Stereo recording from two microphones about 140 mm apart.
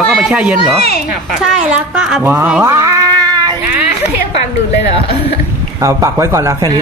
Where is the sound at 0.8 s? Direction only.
90° left.